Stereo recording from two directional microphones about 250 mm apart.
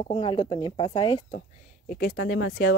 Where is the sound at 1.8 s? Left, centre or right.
Left.